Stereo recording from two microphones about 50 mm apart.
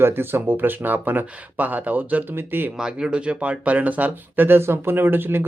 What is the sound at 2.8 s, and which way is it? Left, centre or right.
Speech, centre.